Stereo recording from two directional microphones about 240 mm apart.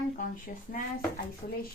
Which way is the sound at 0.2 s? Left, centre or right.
Left.